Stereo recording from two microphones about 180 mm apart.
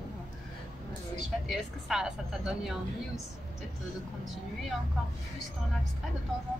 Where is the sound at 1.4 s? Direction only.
5° right (ahead or behind).